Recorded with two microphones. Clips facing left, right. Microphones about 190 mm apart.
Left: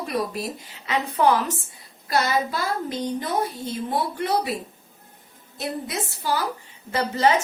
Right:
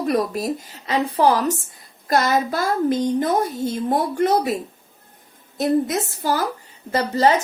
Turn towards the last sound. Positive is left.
turn(degrees=-35)  # may be behind; listen again after turning